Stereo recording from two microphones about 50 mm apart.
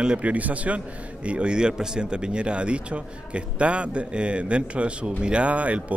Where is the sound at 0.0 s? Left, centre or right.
Centre.